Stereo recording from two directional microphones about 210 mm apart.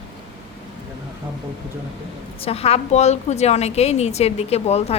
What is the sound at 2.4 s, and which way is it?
A woman's voice, 30° left (ahead or behind).